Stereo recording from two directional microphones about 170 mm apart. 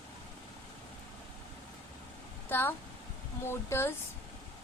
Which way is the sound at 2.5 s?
10° left (ahead or behind).